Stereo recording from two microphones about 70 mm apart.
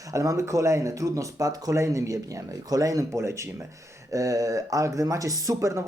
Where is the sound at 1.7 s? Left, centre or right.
Right.